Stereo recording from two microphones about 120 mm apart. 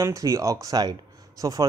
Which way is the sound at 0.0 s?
25° right (ahead or behind).